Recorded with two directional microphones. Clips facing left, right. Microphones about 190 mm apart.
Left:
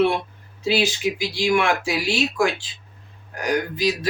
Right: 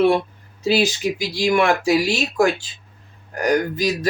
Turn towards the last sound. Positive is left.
turn(degrees=-45)  # may be behind; listen again after turning